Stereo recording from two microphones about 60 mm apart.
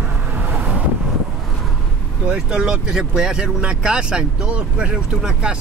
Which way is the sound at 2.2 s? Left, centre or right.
Centre.